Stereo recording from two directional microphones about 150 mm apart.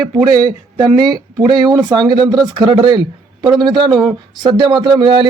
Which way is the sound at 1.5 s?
30° right (ahead or behind).